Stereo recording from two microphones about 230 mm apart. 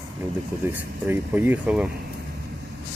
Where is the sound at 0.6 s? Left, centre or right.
Centre.